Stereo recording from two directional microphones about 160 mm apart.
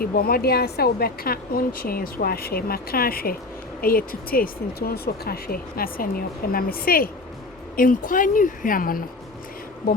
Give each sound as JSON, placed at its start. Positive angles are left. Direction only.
{"t": 0.0, "sound": "a woman's voice", "side_deg": 65}